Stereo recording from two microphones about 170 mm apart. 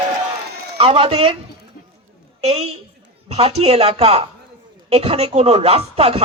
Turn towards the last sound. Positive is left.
turn(degrees=-35)  # may be behind; listen again after turning